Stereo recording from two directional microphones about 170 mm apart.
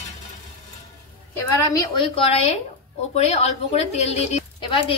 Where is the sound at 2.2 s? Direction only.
35° left (ahead or behind).